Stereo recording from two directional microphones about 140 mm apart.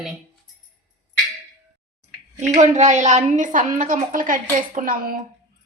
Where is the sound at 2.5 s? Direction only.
55° right (ahead or behind).